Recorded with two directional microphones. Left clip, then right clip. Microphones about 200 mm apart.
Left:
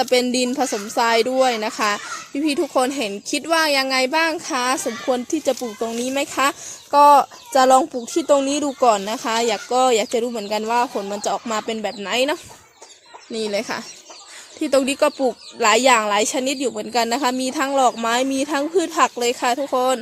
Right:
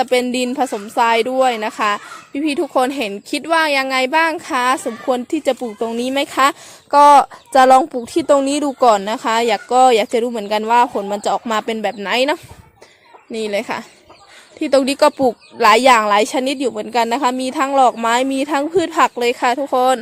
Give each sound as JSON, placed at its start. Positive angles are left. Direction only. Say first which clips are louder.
{"t": 0.0, "sound": "speech", "louder": "right 2 dB", "side_deg": -5}
{"t": 13.3, "sound": "speech", "louder": "right 3 dB", "side_deg": -5}